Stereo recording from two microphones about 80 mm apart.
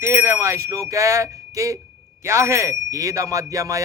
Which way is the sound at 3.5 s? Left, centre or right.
Right.